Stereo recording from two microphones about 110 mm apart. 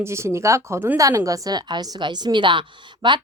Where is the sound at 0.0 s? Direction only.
25° right (ahead or behind).